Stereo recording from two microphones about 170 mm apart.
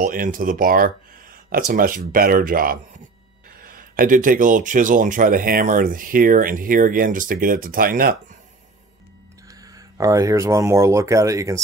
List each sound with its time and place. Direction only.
0.0 s speech: 55° right (ahead or behind)
9.5 s speech: 20° right (ahead or behind)